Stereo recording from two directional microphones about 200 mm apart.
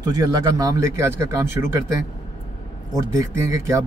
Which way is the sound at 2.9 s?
15° right (ahead or behind).